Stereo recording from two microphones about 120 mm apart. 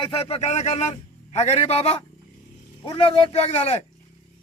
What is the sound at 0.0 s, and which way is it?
A man's voice, 55° left (ahead or behind).